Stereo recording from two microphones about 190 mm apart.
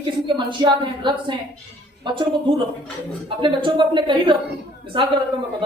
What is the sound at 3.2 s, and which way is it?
Speech, 25° right (ahead or behind).